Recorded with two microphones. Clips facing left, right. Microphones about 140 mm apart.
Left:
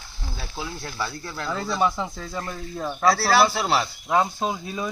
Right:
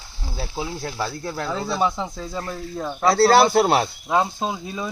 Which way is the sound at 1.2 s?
25° right (ahead or behind).